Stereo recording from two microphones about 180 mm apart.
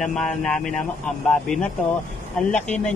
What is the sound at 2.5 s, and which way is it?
Speech, 40° left (ahead or behind).